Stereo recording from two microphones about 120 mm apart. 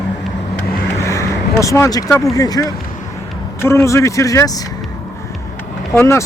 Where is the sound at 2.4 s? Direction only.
30° left (ahead or behind).